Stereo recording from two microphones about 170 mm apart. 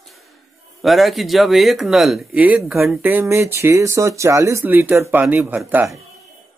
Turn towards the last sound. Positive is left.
turn(degrees=-10)  # may be behind; listen again after turning